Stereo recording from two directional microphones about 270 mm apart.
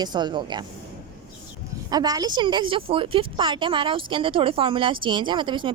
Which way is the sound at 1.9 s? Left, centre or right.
Centre.